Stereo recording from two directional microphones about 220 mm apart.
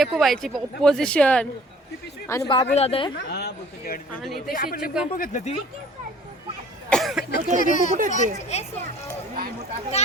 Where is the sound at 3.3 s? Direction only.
45° left (ahead or behind).